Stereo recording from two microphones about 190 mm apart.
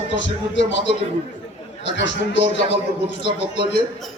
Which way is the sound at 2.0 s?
70° left (ahead or behind).